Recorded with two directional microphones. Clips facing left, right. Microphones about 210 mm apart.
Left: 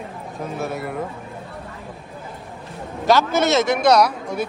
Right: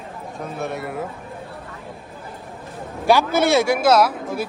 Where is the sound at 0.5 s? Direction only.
Centre (ahead or behind).